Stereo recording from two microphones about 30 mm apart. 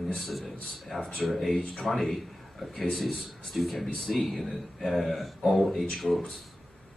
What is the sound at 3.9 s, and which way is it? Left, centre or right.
Speech, centre.